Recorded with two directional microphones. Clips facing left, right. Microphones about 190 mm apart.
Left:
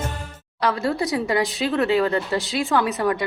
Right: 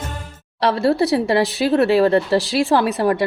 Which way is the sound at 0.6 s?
30° right (ahead or behind).